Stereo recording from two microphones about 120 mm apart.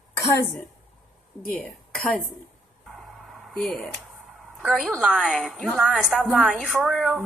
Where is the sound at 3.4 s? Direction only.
Centre (ahead or behind).